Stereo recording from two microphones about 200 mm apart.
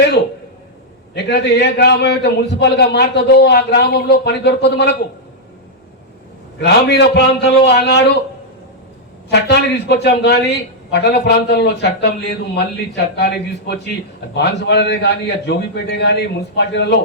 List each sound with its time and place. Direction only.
1.1 s a man's voice: 60° left (ahead or behind)
6.6 s a man's voice: 55° left (ahead or behind)
9.3 s a man's voice: 55° left (ahead or behind)